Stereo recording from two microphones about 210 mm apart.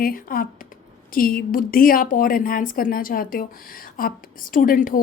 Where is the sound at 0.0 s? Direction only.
40° left (ahead or behind).